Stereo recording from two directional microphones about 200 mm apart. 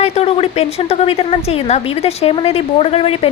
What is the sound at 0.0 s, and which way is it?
A woman's voice, 30° left (ahead or behind).